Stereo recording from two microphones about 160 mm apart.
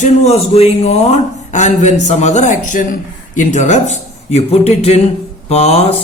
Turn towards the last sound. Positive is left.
turn(degrees=40)  # may be behind; listen again after turning